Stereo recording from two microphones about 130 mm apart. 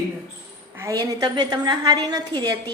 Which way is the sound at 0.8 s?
30° right (ahead or behind).